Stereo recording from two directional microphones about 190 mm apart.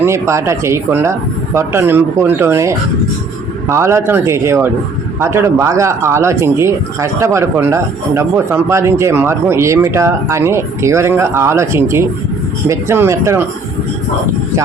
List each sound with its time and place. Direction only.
0.0 s speech: 15° right (ahead or behind)